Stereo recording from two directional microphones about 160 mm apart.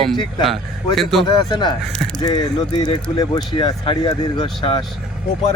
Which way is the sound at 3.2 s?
30° left (ahead or behind).